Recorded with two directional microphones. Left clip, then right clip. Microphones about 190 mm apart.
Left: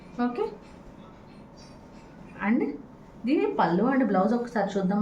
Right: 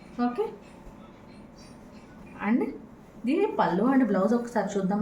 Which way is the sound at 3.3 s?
20° left (ahead or behind).